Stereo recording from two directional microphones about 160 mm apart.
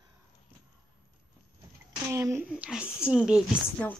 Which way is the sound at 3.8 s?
10° left (ahead or behind).